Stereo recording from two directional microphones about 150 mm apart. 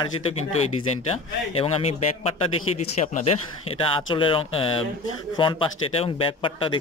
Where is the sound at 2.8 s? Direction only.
45° left (ahead or behind).